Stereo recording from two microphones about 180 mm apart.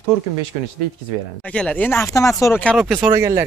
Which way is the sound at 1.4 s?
5° left (ahead or behind).